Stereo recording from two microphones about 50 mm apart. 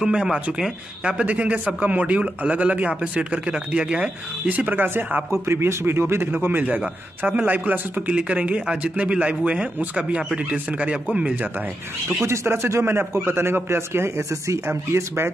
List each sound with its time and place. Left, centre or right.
0.0 s speech: centre
4.5 s a man's voice: right
7.4 s a man's voice: right
8.1 s a man's voice: right
12.3 s a man's voice: right
14.7 s a man's voice: right